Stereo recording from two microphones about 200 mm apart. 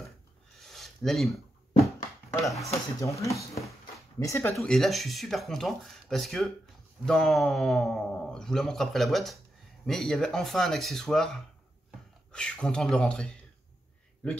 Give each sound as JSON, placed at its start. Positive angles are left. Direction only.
{"t": 0.6, "sound": "a sound", "side_deg": 0}
{"t": 2.4, "sound": "speech", "side_deg": 0}
{"t": 3.0, "sound": "speech", "side_deg": 15}